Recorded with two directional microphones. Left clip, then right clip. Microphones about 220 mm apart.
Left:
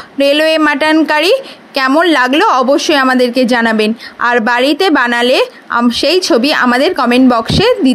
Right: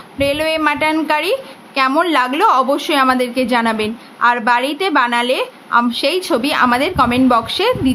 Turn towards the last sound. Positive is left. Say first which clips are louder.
# left 4 dB
turn(degrees=25)  # may be behind; listen again after turning